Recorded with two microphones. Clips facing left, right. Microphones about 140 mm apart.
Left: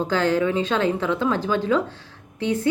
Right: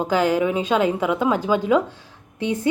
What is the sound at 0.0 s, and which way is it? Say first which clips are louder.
A woman's voice: right 1 dB; 10° right (ahead or behind).